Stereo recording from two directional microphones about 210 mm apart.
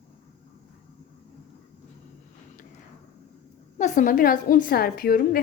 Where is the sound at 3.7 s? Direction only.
35° left (ahead or behind).